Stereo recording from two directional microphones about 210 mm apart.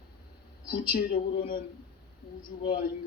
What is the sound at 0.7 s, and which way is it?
Speech, 45° left (ahead or behind).